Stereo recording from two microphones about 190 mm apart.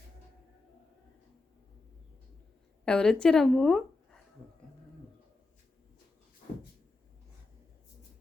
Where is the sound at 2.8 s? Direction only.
5° left (ahead or behind).